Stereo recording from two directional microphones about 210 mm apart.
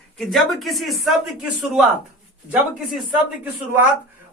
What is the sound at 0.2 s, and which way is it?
Speech, centre (ahead or behind).